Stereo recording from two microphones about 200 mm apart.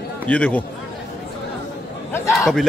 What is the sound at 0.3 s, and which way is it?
Speech, 5° left (ahead or behind).